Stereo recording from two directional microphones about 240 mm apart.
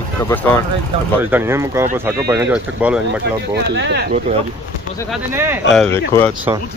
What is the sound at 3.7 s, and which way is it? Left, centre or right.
Speech, right.